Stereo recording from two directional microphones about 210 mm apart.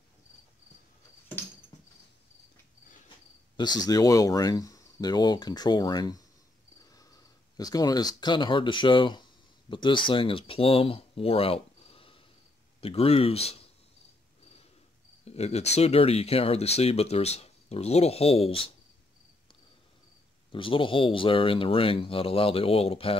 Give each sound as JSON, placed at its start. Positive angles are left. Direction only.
{"t": 3.5, "sound": "speech", "side_deg": 20}
{"t": 7.5, "sound": "speech", "side_deg": 20}
{"t": 15.2, "sound": "speech", "side_deg": 30}
{"t": 20.5, "sound": "speech", "side_deg": 25}